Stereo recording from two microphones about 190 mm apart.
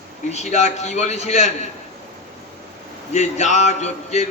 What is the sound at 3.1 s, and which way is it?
A man's voice, 35° left (ahead or behind).